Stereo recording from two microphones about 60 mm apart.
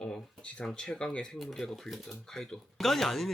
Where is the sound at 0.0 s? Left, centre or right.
Centre.